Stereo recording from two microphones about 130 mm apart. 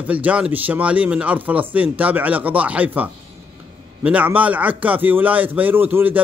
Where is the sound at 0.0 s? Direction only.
10° right (ahead or behind).